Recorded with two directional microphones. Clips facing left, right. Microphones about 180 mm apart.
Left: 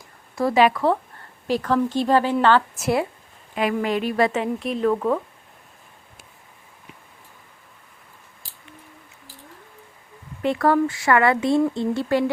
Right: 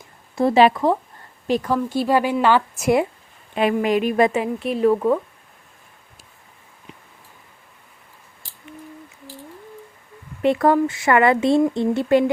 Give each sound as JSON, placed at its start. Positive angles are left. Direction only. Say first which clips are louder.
{"t": 0.3, "sound": "speech", "louder": "right 3 dB", "side_deg": -25}
{"t": 1.5, "sound": "speech", "louder": "even", "side_deg": -15}
{"t": 10.4, "sound": "speech", "louder": "right 3 dB", "side_deg": -20}